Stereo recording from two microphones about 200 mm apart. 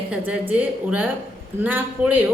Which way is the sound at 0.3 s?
5° right (ahead or behind).